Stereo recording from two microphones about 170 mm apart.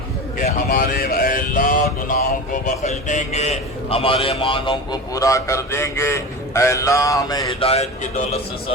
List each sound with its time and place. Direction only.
0.3 s mantra: 50° left (ahead or behind); by 7.7 s 25° left (ahead or behind)